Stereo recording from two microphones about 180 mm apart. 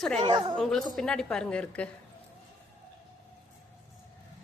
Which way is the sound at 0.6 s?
5° left (ahead or behind).